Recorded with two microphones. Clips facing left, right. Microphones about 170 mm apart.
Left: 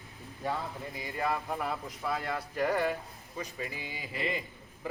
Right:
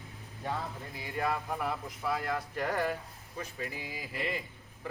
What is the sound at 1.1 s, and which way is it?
A man's voice, centre (ahead or behind).